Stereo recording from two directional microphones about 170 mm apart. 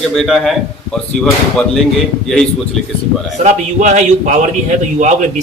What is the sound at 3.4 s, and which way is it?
Speech, 45° right (ahead or behind).